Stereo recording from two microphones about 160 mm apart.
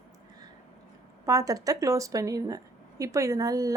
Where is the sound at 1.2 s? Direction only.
20° right (ahead or behind).